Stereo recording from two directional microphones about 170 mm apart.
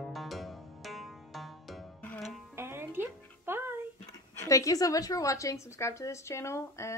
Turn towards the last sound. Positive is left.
turn(degrees=15)  # may be behind; listen again after turning